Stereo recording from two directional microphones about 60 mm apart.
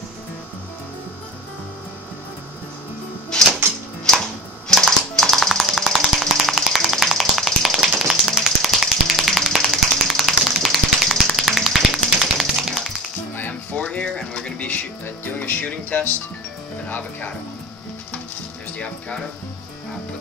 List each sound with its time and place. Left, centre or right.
3.3 s music: centre
7.9 s finger snapping: centre
12.2 s tap: centre
13.4 s music: left
15.3 s music: left
18.8 s speech: centre